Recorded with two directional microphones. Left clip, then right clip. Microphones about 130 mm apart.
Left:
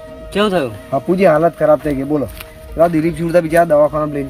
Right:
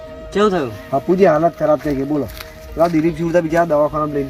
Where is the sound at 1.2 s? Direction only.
35° left (ahead or behind).